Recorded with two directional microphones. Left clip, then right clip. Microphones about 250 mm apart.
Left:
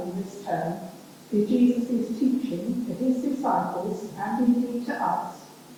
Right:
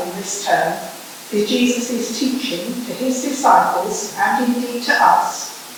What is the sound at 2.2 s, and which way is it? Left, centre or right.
A woman's voice, centre.